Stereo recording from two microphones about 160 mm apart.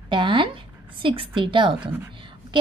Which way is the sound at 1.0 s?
30° right (ahead or behind).